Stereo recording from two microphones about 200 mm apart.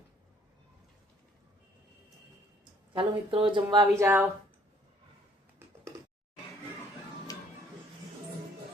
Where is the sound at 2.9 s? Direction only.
25° right (ahead or behind); by 4.3 s 10° right (ahead or behind).